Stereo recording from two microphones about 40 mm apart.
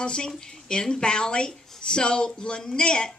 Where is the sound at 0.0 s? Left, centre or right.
Left.